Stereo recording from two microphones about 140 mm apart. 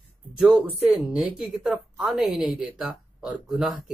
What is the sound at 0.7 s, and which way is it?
A woman's voice, centre (ahead or behind).